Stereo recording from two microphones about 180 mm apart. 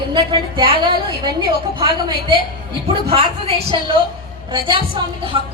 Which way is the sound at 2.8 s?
30° right (ahead or behind).